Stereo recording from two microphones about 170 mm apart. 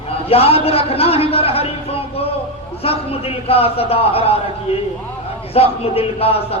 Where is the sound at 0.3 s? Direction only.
35° left (ahead or behind).